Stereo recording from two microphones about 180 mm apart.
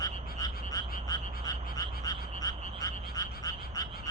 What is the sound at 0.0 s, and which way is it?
Frog, 20° left (ahead or behind).